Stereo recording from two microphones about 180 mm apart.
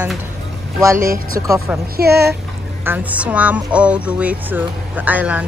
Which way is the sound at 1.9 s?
65° right (ahead or behind).